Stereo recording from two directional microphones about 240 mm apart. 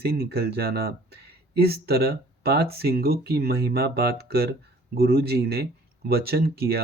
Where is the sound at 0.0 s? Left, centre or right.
Right.